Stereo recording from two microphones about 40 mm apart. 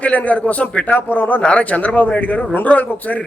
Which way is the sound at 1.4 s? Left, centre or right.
Left.